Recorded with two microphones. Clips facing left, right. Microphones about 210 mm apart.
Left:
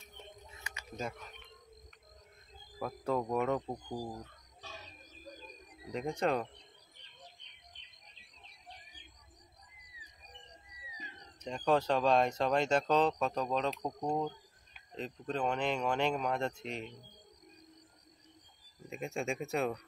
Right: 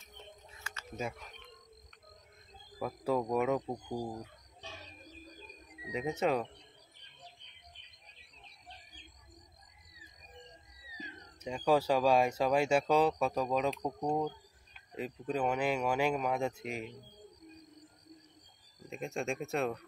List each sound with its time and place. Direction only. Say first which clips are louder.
0.7 s a sound: right 2 dB; 20° left (ahead or behind)
2.8 s speech: right 2 dB; 5° right (ahead or behind)
5.9 s speech: right 1 dB; 5° right (ahead or behind)
11.4 s speech: right 1 dB; 10° right (ahead or behind)
15.0 s speech: right 2 dB; 10° right (ahead or behind)
18.9 s speech: even; centre (ahead or behind)